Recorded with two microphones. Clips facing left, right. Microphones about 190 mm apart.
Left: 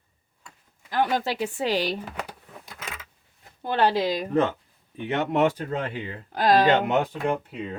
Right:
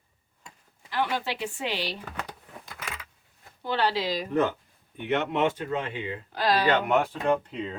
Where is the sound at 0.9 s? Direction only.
45° left (ahead or behind).